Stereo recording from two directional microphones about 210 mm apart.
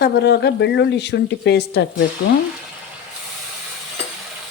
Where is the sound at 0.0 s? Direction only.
50° left (ahead or behind).